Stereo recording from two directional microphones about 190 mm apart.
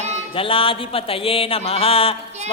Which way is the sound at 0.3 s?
30° left (ahead or behind).